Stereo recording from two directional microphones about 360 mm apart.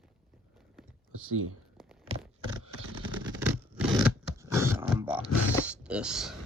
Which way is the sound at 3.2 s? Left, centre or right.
Centre.